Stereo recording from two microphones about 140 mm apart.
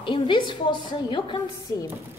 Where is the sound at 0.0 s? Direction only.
35° left (ahead or behind).